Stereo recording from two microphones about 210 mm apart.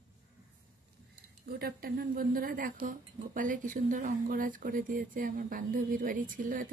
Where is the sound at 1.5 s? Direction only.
45° right (ahead or behind).